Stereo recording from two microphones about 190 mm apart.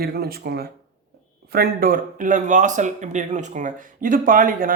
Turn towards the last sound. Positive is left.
turn(degrees=-45)  # may be behind; listen again after turning